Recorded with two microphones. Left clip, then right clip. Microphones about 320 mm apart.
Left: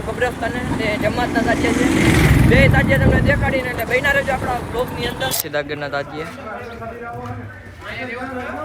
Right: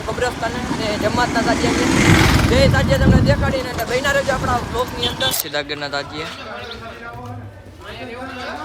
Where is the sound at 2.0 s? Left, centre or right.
Right.